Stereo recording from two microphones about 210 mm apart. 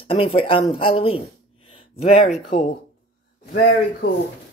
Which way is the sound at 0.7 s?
25° left (ahead or behind).